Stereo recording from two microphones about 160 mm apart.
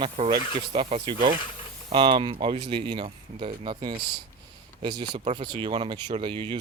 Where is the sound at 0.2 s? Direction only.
45° right (ahead or behind).